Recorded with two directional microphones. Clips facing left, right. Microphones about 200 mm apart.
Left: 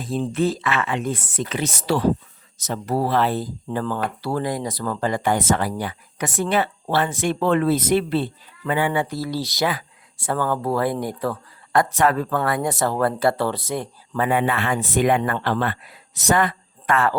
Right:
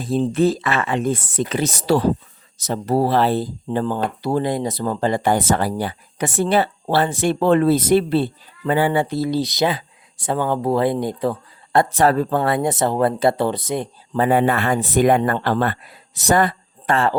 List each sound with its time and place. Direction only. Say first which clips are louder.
0.0 s speech: right 4 dB; 35° right (ahead or behind)
14.2 s speech: right 4 dB; 35° right (ahead or behind)